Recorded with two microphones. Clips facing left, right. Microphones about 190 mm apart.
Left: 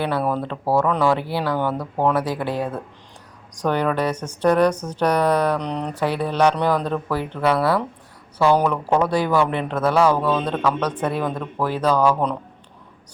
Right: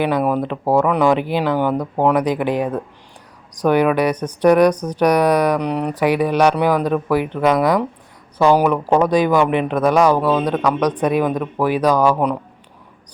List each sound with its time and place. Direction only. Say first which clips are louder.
0.0 s a woman's voice: right 5 dB; 15° right (ahead or behind)